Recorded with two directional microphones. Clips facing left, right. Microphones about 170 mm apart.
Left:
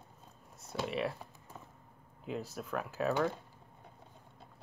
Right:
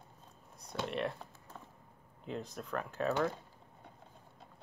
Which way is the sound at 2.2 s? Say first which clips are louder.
Left 2 dB; 5° left (ahead or behind).